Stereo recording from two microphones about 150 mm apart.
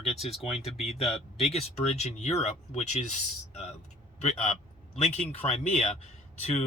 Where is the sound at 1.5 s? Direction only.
45° left (ahead or behind).